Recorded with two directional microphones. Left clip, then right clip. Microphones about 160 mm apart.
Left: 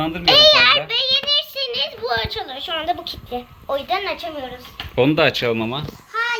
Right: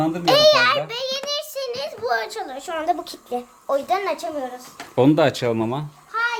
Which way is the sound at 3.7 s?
25° right (ahead or behind).